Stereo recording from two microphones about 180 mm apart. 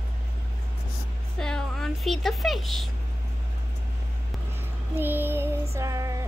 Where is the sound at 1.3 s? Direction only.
5° left (ahead or behind).